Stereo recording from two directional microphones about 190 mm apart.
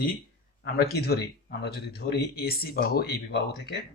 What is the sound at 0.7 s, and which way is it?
Speech, 55° left (ahead or behind).